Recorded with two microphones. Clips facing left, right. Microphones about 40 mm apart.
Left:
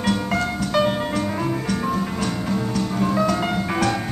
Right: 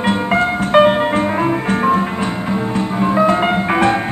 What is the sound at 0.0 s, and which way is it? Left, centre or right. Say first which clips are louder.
Music: right 7 dB; right.